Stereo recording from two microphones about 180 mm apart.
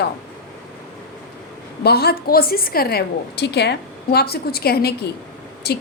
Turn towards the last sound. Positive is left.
turn(degrees=65)  # may be behind; listen again after turning